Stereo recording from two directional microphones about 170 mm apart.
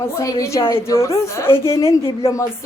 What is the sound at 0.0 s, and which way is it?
A woman's voice, 20° left (ahead or behind).